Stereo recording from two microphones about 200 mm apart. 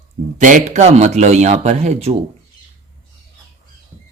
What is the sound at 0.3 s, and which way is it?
A man's voice, 40° right (ahead or behind).